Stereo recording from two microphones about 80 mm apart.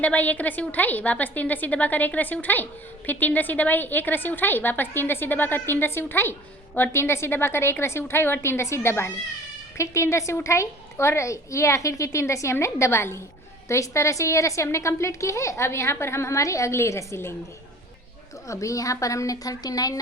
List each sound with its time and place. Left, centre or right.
0.0 s a woman's voice: centre
18.4 s a woman's voice: left